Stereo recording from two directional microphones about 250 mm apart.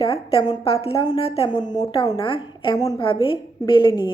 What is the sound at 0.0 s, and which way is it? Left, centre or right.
A woman's voice, left.